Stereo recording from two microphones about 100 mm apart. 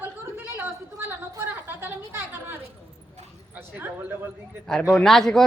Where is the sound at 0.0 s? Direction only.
20° right (ahead or behind).